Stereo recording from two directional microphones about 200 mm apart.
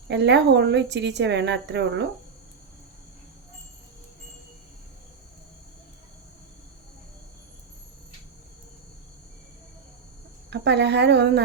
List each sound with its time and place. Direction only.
0.1 s a woman's voice: 60° right (ahead or behind)
10.5 s a woman's voice: 55° right (ahead or behind)